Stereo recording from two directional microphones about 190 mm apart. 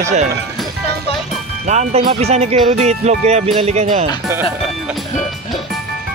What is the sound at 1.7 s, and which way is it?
Music, 35° right (ahead or behind).